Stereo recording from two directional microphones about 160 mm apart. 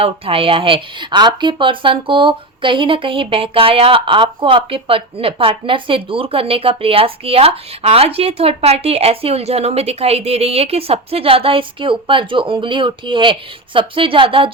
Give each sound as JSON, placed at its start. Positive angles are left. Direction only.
{"t": 0.0, "sound": "speech", "side_deg": -35}